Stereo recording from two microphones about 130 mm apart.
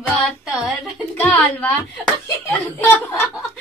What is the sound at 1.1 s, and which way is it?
Speech, 15° left (ahead or behind).